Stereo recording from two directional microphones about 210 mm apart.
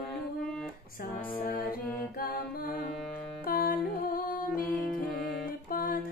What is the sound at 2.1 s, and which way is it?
Mantra, 45° left (ahead or behind).